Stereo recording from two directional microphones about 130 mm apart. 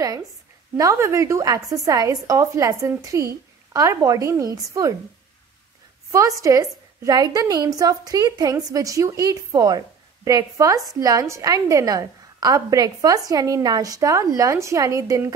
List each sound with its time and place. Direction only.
0.7 s a woman's voice: 25° right (ahead or behind)
6.1 s a woman's voice: 25° right (ahead or behind)